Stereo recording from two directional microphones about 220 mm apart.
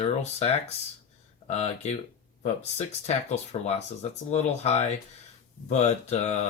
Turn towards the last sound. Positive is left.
turn(degrees=30)  # may be behind; listen again after turning